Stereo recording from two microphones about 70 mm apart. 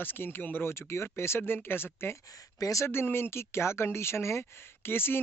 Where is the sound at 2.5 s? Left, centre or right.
Left.